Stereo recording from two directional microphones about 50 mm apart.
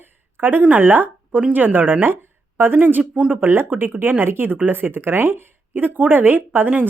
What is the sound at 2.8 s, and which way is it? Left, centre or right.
Speech, right.